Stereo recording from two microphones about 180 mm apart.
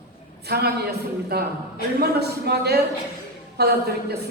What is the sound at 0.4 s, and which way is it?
A woman's voice, 65° right (ahead or behind).